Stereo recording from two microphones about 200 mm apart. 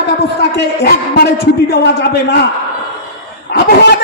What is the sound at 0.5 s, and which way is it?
A man's voice, 55° left (ahead or behind).